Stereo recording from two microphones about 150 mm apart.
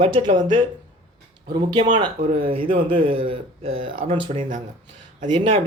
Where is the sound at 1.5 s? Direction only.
30° right (ahead or behind).